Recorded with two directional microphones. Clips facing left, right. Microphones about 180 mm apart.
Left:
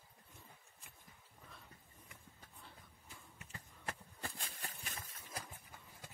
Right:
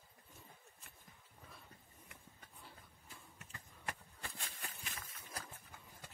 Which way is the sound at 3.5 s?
35° left (ahead or behind).